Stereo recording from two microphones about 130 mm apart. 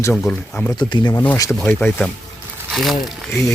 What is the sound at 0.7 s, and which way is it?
Speech, 35° left (ahead or behind).